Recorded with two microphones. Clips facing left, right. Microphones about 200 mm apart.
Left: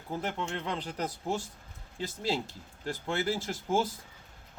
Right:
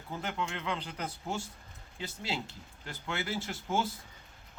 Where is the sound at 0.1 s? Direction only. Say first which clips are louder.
Left 3 dB; 35° left (ahead or behind).